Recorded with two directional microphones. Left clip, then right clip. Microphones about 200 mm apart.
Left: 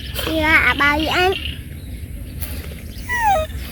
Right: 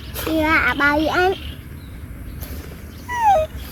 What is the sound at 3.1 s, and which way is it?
Dog, 45° right (ahead or behind).